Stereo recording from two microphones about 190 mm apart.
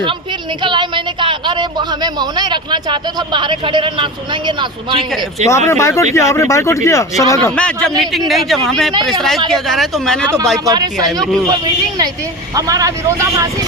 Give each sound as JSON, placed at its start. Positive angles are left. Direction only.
{"t": 0.6, "sound": "speech", "side_deg": -25}
{"t": 5.5, "sound": "speech", "side_deg": 15}
{"t": 7.5, "sound": "speech", "side_deg": 5}
{"t": 10.7, "sound": "speech", "side_deg": -20}
{"t": 11.2, "sound": "speech", "side_deg": 0}
{"t": 11.4, "sound": "speech", "side_deg": -20}